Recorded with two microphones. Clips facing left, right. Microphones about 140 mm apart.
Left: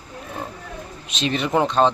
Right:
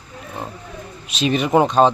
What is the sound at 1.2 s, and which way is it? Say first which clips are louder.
Speech: right 4 dB; 15° right (ahead or behind).